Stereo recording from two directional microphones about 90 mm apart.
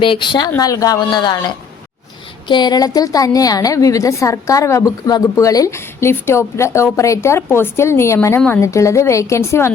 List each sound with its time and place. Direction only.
0.0 s speech: 65° left (ahead or behind)
0.6 s a woman's voice: 40° left (ahead or behind)